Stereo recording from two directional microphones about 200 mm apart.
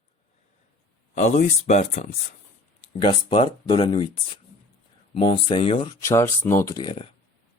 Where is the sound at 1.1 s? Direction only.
35° left (ahead or behind).